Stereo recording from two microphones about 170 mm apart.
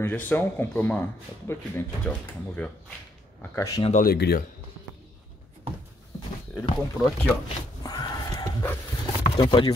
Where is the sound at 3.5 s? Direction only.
20° left (ahead or behind).